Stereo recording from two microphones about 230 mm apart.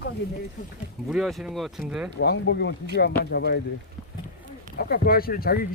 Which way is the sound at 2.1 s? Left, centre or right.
Left.